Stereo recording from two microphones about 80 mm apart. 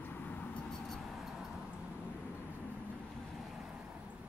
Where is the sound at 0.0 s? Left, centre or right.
Left.